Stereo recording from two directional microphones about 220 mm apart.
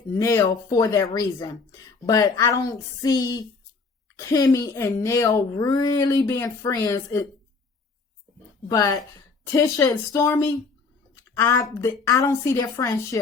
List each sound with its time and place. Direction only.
0.1 s speech: 15° left (ahead or behind)
8.7 s speech: 15° left (ahead or behind)